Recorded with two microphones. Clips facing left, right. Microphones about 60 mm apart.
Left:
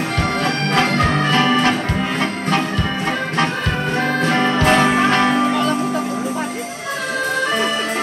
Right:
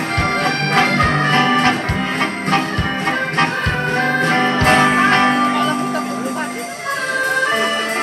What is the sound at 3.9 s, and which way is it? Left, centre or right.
Music, right.